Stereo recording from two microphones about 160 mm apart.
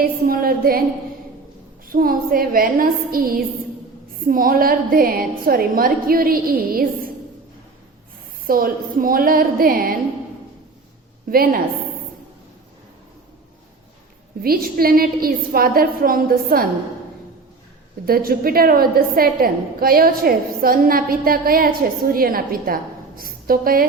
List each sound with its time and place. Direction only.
0.0 s a sound: 65° right (ahead or behind)
1.9 s a woman's voice: 65° right (ahead or behind)
8.4 s a woman's voice: 65° right (ahead or behind)
11.3 s a woman's voice: 65° right (ahead or behind)
14.4 s a woman's voice: 65° right (ahead or behind)
18.0 s a woman's voice: 65° right (ahead or behind)